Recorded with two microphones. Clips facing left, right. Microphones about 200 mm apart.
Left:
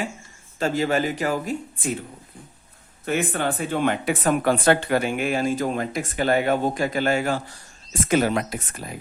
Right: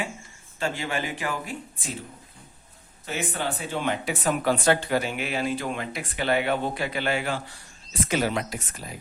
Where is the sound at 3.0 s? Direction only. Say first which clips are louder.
Left 6 dB; 55° left (ahead or behind).